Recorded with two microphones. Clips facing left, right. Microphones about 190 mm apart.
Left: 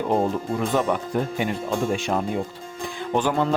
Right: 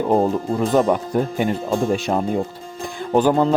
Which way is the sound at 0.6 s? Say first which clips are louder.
Right 6 dB; 35° right (ahead or behind).